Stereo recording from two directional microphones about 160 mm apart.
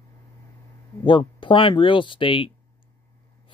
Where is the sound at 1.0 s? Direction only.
30° left (ahead or behind).